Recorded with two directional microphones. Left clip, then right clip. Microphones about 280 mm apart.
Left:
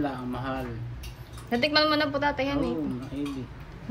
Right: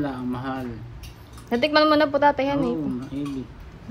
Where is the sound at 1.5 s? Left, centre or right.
Centre.